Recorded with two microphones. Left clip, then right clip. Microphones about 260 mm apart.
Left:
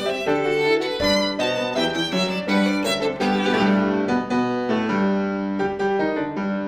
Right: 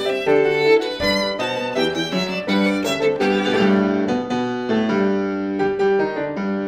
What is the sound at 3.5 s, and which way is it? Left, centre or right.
Music, right.